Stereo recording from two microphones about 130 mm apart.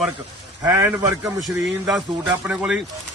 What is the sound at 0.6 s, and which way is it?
Speech, 25° right (ahead or behind).